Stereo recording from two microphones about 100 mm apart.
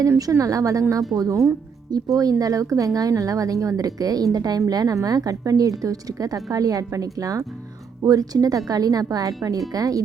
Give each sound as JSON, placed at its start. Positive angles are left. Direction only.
{"t": 0.2, "sound": "speech", "side_deg": -35}